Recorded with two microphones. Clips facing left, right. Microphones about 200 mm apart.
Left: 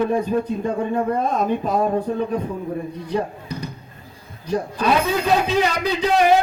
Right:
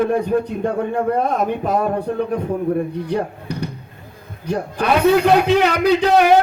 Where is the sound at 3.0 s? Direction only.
70° right (ahead or behind).